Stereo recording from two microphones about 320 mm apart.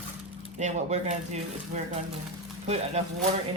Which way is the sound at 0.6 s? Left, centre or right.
Right.